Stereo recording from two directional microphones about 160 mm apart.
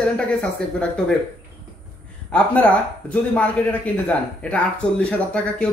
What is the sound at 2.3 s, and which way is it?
Speech, 10° left (ahead or behind).